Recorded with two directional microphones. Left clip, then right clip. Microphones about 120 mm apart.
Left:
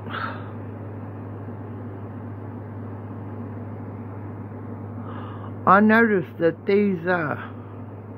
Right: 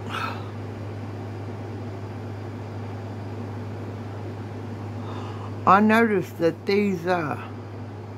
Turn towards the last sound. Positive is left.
turn(degrees=-20)  # may be behind; listen again after turning